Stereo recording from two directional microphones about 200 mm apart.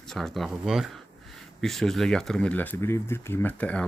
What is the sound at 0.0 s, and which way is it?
Speech, centre (ahead or behind).